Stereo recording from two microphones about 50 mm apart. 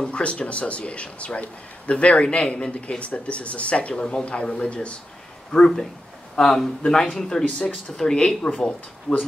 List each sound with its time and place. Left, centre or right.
0.0 s speech: left
7.4 s speech: left
7.7 s speech: centre